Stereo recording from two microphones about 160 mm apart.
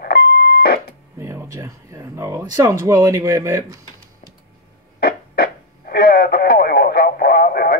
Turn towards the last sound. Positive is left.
turn(degrees=70)  # may be behind; listen again after turning